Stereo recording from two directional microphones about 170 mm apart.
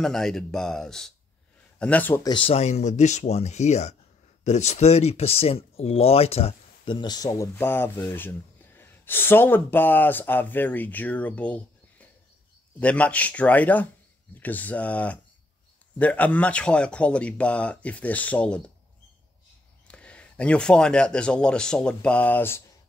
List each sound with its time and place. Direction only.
0.0 s speech: centre (ahead or behind)
2.2 s speech: 30° left (ahead or behind); by 18.6 s 5° left (ahead or behind)
19.9 s speech: 5° left (ahead or behind)